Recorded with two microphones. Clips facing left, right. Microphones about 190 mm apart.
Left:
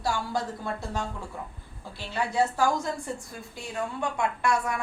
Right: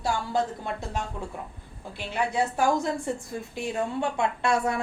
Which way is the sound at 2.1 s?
20° right (ahead or behind).